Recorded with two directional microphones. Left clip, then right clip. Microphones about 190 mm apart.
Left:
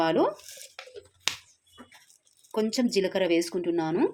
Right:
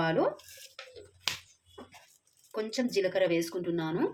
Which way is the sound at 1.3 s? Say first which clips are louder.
Left 3 dB; 35° left (ahead or behind).